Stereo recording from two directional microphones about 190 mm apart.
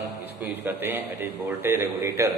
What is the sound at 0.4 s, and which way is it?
A man's voice, 10° right (ahead or behind).